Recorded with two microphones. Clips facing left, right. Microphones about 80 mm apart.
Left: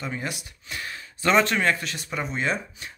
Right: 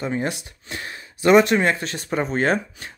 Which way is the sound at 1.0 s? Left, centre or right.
Centre.